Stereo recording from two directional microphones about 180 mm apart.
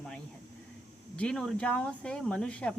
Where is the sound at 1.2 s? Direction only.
5° left (ahead or behind).